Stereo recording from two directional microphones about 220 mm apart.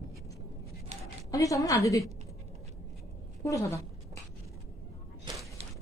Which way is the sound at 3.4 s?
15° left (ahead or behind).